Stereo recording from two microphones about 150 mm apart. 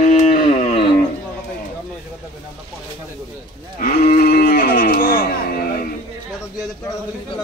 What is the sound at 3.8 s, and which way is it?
Speech, 85° left.